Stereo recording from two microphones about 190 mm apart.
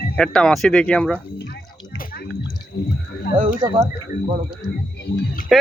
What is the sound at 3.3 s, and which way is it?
Speech, 55° left (ahead or behind).